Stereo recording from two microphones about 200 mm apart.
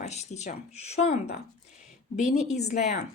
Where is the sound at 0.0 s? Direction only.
35° left (ahead or behind).